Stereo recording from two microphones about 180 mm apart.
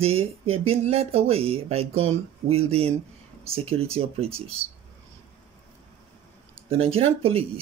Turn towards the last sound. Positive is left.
turn(degrees=-30)  # may be behind; listen again after turning